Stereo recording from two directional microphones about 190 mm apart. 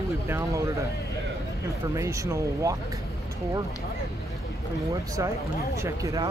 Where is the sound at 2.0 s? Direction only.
15° right (ahead or behind).